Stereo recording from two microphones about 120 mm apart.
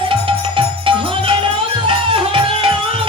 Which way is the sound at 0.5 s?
45° right (ahead or behind).